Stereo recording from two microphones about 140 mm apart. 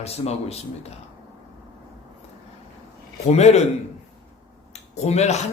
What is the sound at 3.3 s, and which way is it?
Speech, 50° left (ahead or behind).